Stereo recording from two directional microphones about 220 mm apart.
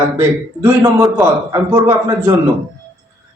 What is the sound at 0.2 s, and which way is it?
A man's voice, 15° right (ahead or behind).